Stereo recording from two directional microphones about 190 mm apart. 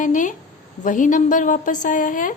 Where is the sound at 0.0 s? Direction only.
40° left (ahead or behind).